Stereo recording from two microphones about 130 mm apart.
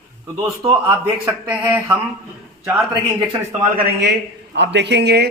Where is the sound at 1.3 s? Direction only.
15° right (ahead or behind).